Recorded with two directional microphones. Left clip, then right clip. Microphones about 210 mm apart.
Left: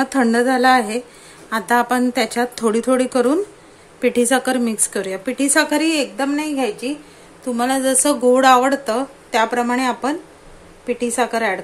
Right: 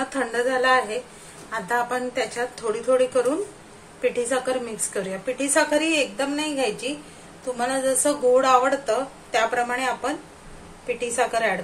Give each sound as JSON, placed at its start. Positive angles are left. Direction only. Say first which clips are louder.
{"t": 0.0, "sound": "a woman's voice", "louder": "left 7 dB", "side_deg": 50}
{"t": 7.5, "sound": "a woman's voice", "louder": "left 5 dB", "side_deg": 45}
{"t": 11.1, "sound": "a woman's voice", "louder": "left 2 dB", "side_deg": 45}